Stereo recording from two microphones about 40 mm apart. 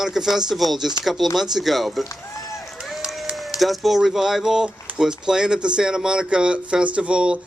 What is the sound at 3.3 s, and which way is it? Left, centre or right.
Speech, centre.